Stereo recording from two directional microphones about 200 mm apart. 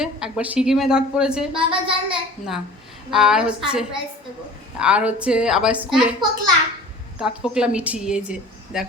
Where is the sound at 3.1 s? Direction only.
5° right (ahead or behind).